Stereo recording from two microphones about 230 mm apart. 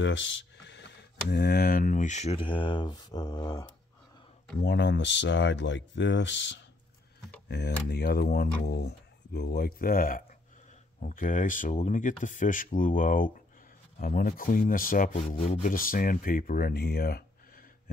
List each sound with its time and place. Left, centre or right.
0.0 s speech: left; by 3.6 s centre
4.6 s speech: left